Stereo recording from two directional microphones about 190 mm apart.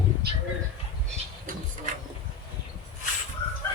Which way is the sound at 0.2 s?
60° right (ahead or behind).